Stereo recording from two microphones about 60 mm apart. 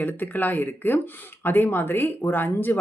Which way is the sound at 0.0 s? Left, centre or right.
Left.